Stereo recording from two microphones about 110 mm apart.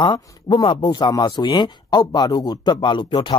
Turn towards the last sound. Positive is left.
turn(degrees=45)  # may be behind; listen again after turning